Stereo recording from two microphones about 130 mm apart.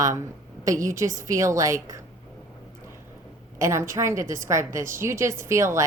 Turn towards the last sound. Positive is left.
turn(degrees=-20)  # may be behind; listen again after turning